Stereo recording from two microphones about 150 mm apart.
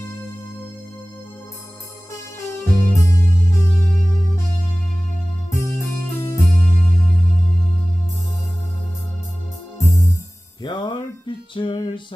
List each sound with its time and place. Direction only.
2.1 s music: 20° left (ahead or behind)
5.5 s music: 20° left (ahead or behind)
9.7 s music: 20° left (ahead or behind)
10.6 s music: 30° left (ahead or behind)